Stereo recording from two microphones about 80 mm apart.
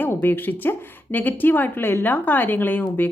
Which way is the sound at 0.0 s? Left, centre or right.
Left.